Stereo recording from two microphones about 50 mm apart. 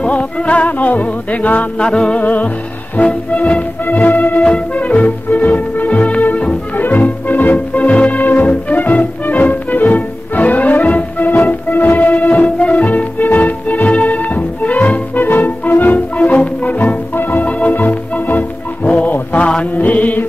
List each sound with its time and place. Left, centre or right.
0.0 s music: left
1.8 s music: centre
2.2 s music: left
3.8 s music: left
6.8 s music: left
18.9 s mantra: left
19.6 s music: left